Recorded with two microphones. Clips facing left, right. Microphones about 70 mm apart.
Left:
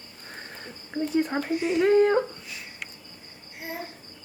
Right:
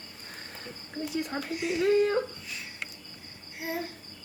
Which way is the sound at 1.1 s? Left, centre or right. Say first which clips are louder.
Left 8 dB; left.